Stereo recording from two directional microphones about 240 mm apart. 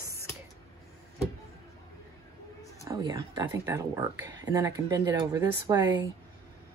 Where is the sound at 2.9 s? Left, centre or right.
Centre.